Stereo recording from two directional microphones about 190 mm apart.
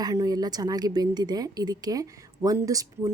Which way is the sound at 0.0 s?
20° right (ahead or behind).